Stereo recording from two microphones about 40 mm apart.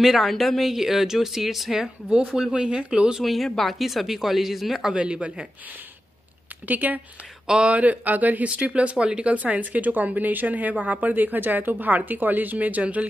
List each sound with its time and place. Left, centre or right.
0.0 s speech: centre
2.0 s speech: right
3.3 s speech: centre
4.9 s speech: right
6.7 s speech: right
7.4 s speech: right
7.7 s speech: right
8.5 s speech: right